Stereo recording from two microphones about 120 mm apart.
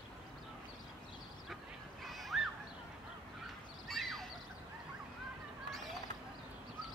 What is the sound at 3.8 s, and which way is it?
Fowl, centre (ahead or behind).